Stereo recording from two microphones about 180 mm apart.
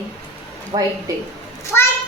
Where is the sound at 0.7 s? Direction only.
25° right (ahead or behind).